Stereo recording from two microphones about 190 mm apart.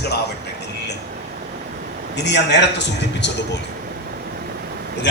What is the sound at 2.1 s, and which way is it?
A man's voice, 65° left (ahead or behind).